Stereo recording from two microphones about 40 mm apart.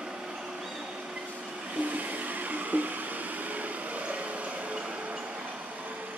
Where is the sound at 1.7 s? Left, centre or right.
Right.